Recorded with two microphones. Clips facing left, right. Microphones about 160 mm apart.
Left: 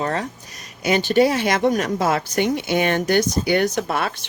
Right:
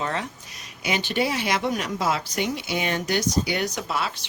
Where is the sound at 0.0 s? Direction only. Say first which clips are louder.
Left 5 dB; 40° left (ahead or behind).